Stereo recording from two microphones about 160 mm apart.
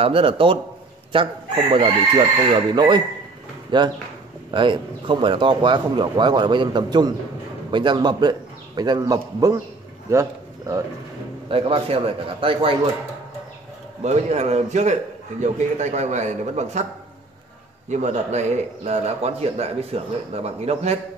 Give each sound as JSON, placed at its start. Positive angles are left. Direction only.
{"t": 0.0, "sound": "a man's voice", "side_deg": -35}
{"t": 11.5, "sound": "a man's voice", "side_deg": -35}
{"t": 14.0, "sound": "a man's voice", "side_deg": -45}
{"t": 17.8, "sound": "a man's voice", "side_deg": -50}